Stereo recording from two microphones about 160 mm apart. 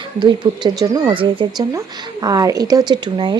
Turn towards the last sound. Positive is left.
turn(degrees=-30)  # may be behind; listen again after turning